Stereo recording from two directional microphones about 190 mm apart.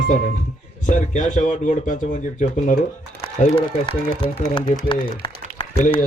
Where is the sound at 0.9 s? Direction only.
40° left (ahead or behind).